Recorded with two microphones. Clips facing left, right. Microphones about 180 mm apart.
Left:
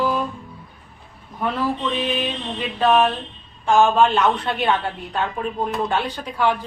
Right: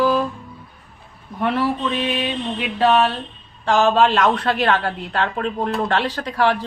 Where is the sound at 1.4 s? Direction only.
80° right.